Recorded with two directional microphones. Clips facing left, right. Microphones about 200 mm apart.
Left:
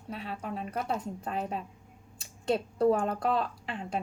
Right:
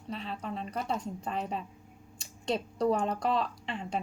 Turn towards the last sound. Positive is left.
turn(degrees=0)  # may be behind; listen again after turning